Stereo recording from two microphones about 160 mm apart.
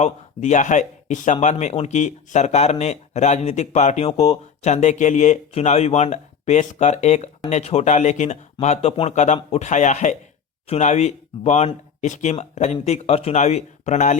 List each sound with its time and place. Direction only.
0.0 s speech: 45° left (ahead or behind)